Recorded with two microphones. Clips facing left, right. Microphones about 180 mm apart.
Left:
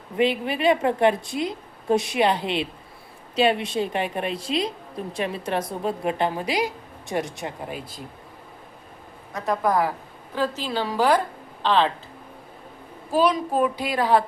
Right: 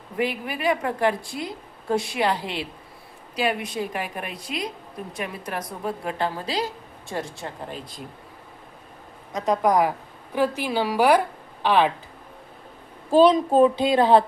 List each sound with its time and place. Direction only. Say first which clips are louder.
0.2 s a woman's voice: left 4 dB; 25° left (ahead or behind); by 8.0 s 5° left (ahead or behind)
9.3 s a woman's voice: right 2 dB; 20° right (ahead or behind)
13.1 s a child's voice: right 5 dB; 25° right (ahead or behind)